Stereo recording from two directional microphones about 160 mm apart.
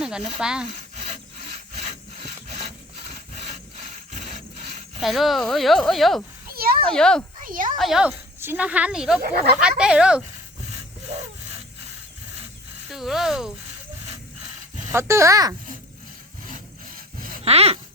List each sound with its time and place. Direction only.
0.0 s a sound: 5° right (ahead or behind)
0.3 s speech: 5° right (ahead or behind)
0.9 s wood: 40° right (ahead or behind)
2.5 s wood: 40° right (ahead or behind)
4.1 s rub: 50° right (ahead or behind)
4.9 s speech: centre (ahead or behind)
6.5 s a sound: 70° right (ahead or behind)
6.8 s speech: 5° left (ahead or behind)
7.4 s speech: 55° right (ahead or behind)
7.8 s speech: 5° right (ahead or behind)
12.9 s speech: centre (ahead or behind)
14.9 s speech: 15° right (ahead or behind)
17.2 s a sound: 60° right (ahead or behind)
17.4 s a sound: 40° right (ahead or behind)